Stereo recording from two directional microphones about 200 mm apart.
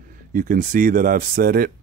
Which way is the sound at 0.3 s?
45° right (ahead or behind).